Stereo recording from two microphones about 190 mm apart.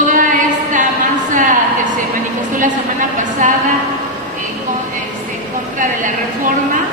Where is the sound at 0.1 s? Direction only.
45° right (ahead or behind).